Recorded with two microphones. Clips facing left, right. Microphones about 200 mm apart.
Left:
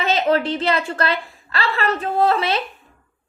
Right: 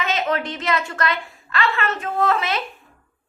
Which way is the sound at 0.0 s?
30° left (ahead or behind).